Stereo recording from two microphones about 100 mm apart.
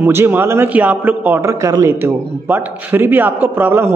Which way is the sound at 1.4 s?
30° right (ahead or behind).